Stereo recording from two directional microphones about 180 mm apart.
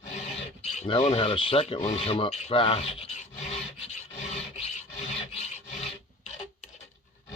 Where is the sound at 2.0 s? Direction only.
25° left (ahead or behind).